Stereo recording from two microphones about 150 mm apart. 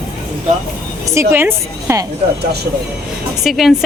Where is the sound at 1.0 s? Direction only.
20° right (ahead or behind).